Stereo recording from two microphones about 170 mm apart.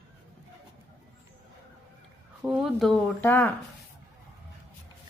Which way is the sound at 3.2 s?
10° left (ahead or behind).